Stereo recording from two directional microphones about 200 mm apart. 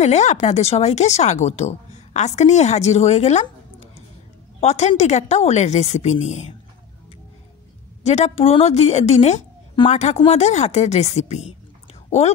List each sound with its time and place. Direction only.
0.0 s speech: 35° left (ahead or behind)
4.6 s speech: 35° left (ahead or behind)
8.0 s a woman's voice: 35° left (ahead or behind)